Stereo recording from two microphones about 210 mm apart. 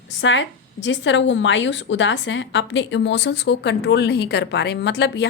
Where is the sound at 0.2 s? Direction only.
60° left (ahead or behind).